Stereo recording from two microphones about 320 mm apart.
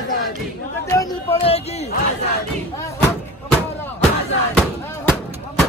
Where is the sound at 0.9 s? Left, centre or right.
Centre.